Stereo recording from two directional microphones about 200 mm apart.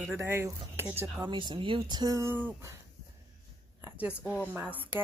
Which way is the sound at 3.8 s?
10° right (ahead or behind).